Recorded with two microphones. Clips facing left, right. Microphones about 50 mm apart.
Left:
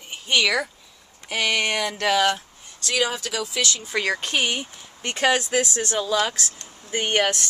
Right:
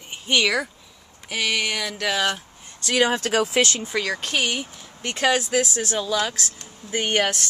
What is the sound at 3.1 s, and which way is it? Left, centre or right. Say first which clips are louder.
Speech: right 6 dB; right.